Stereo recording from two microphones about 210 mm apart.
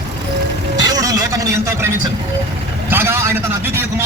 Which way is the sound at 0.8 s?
20° right (ahead or behind).